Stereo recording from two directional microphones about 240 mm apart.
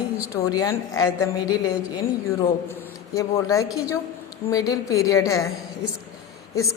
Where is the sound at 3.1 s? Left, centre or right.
Centre.